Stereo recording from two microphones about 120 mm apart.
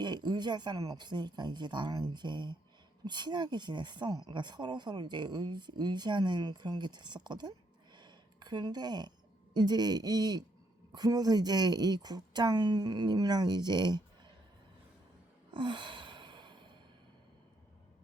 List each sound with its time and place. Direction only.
0.0 s a woman's voice: 40° right (ahead or behind)
15.5 s sigh: 45° right (ahead or behind)